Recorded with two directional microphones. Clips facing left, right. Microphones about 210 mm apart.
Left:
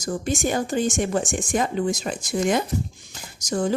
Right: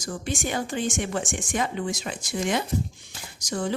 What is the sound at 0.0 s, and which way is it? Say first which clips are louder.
A woman's voice: left 6 dB; 40° left (ahead or behind).